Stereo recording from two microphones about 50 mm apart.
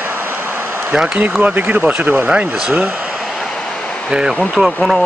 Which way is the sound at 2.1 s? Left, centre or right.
Centre.